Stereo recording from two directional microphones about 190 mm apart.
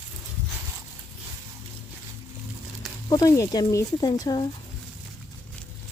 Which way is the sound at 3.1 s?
15° left (ahead or behind).